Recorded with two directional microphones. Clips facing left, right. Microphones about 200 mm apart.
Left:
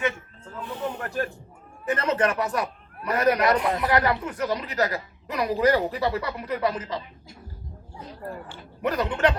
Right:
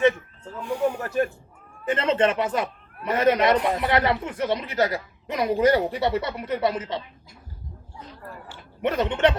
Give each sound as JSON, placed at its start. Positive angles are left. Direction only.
{"t": 0.6, "sound": "snake", "side_deg": -10}
{"t": 1.9, "sound": "speech", "side_deg": -25}
{"t": 8.8, "sound": "speech", "side_deg": -25}